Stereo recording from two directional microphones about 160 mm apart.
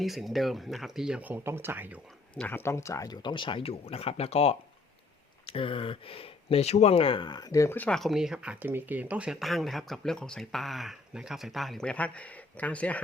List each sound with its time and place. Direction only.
0.0 s speech: centre (ahead or behind)
2.3 s speech: 10° left (ahead or behind)